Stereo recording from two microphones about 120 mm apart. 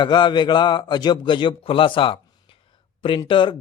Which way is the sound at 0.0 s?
40° left (ahead or behind).